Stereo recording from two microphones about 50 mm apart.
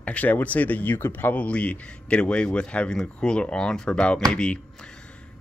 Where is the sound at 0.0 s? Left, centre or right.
Left.